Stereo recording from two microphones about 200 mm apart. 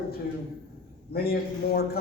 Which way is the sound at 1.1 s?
50° left (ahead or behind).